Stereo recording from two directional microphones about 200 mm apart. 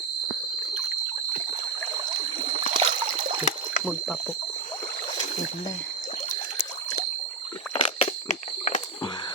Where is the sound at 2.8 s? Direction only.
30° right (ahead or behind).